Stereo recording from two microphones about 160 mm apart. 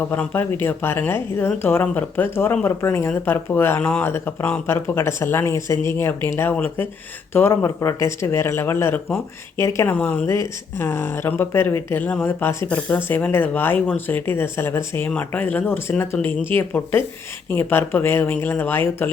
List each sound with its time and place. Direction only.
0.1 s speech: 10° left (ahead or behind)